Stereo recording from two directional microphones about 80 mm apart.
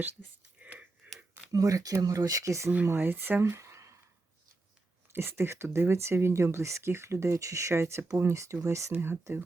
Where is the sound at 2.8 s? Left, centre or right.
Right.